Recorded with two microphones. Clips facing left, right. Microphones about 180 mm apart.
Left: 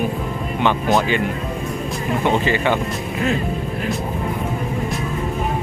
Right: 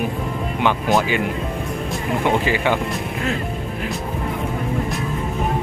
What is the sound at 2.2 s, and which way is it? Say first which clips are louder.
Speech: left 1 dB; 10° right (ahead or behind).